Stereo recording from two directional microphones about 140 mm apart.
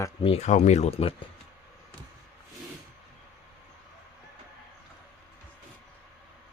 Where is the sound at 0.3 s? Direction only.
50° left (ahead or behind).